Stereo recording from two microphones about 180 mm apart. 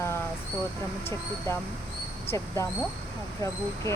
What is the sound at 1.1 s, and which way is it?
Speech, 15° left (ahead or behind).